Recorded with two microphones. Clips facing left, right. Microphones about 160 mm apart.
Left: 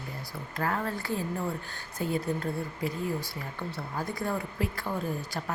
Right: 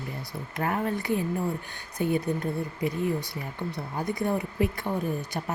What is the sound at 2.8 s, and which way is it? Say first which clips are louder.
Speech: right 4 dB; 20° right (ahead or behind).